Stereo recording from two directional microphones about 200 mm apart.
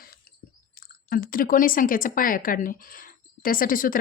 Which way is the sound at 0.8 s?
45° left (ahead or behind).